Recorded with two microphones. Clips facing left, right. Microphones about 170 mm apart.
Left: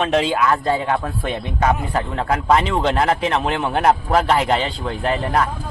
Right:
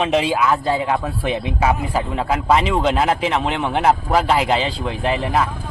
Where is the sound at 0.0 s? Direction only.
5° right (ahead or behind).